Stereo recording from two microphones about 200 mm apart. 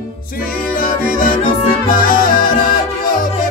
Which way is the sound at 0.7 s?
45° left (ahead or behind).